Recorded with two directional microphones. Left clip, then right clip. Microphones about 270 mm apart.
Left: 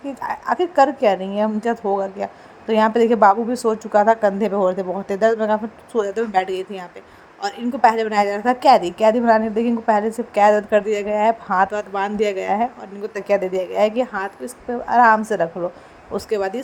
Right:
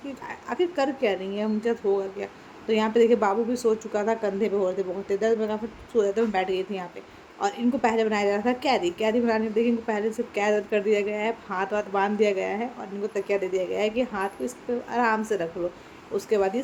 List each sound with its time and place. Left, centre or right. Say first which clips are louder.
0.2 s a woman's voice: left 7 dB; left